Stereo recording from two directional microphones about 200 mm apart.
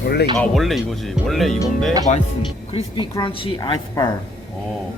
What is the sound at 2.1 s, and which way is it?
A woman's voice, 35° left (ahead or behind).